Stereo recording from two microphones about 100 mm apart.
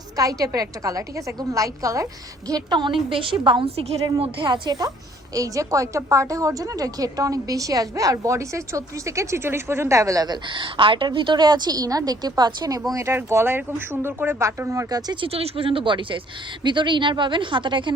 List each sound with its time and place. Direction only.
0.2 s a woman's voice: 35° right (ahead or behind); by 3.7 s 55° right (ahead or behind)
3.8 s a woman's voice: 90° right
4.0 s speech: 55° right (ahead or behind)
5.3 s a woman's voice: 35° right (ahead or behind)
12.9 s speech: 30° right (ahead or behind)
15.2 s speech: 80° right; by 17.9 s 55° right (ahead or behind)